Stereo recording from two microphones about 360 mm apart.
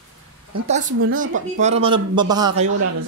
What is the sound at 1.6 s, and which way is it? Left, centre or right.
Speech, centre.